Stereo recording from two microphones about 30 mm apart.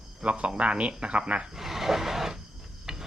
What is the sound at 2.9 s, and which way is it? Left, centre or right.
Ratchet, right.